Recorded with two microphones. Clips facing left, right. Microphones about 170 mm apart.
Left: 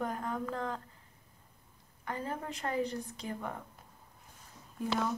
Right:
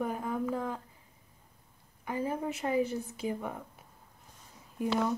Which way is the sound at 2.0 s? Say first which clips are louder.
Right 5 dB; 10° right (ahead or behind).